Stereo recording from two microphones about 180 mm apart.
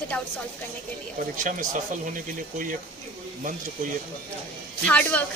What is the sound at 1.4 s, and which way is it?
Speech, 45° right (ahead or behind).